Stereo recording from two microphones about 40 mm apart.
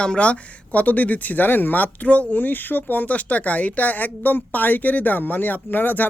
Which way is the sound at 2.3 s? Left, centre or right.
Left.